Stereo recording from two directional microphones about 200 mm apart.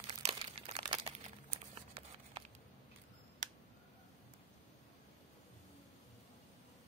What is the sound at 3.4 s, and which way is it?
Tick, 40° right (ahead or behind).